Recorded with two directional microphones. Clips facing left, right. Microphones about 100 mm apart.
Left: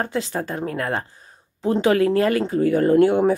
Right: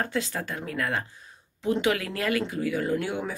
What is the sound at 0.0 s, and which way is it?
A woman's voice, 35° left (ahead or behind).